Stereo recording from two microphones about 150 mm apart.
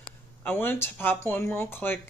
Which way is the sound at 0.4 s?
15° left (ahead or behind).